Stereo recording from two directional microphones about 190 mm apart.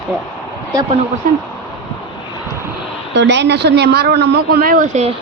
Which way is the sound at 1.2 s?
45° right (ahead or behind).